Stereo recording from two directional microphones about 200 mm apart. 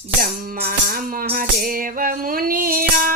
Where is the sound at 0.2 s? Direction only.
45° right (ahead or behind).